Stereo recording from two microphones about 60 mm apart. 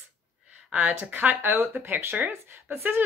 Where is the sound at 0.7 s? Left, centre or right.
Right.